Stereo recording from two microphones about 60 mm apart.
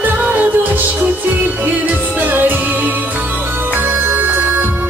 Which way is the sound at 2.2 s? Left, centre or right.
Right.